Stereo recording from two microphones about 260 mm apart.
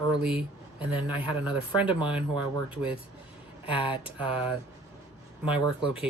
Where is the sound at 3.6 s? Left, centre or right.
Centre.